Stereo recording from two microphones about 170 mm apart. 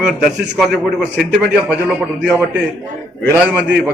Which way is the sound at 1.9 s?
15° right (ahead or behind).